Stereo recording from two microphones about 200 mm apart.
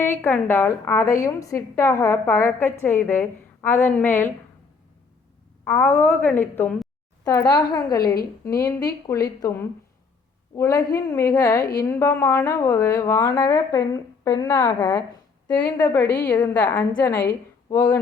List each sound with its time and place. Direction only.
0.0 s a woman's voice: 10° left (ahead or behind)
5.6 s a woman's voice: 10° left (ahead or behind)
7.4 s a woman's voice: 20° left (ahead or behind)